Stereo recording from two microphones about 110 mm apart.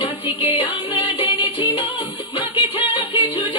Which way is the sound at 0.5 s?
50° left (ahead or behind).